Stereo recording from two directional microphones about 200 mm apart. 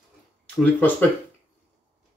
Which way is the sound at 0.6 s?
10° left (ahead or behind).